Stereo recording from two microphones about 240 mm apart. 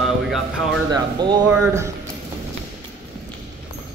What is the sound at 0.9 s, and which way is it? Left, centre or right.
Speech, centre.